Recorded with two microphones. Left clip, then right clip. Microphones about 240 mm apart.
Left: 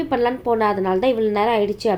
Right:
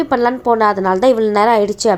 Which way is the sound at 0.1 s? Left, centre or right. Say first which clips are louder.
Right 4 dB; right.